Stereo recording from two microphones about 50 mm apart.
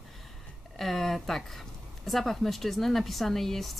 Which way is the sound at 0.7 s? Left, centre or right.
Centre.